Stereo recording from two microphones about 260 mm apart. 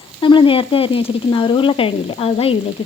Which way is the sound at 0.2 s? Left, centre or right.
Centre.